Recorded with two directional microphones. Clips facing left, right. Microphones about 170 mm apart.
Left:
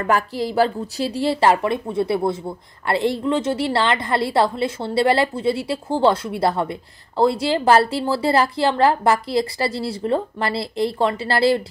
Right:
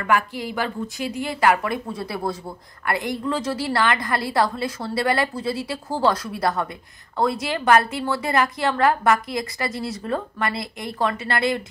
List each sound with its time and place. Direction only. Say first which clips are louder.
0.0 s a woman's voice: left 2 dB; 35° left (ahead or behind)